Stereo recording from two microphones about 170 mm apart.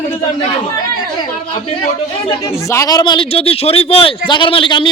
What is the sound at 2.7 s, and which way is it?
Speech, 20° left (ahead or behind).